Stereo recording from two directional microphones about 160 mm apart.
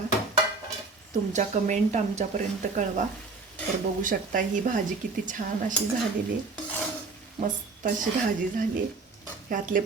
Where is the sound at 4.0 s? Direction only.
55° right (ahead or behind).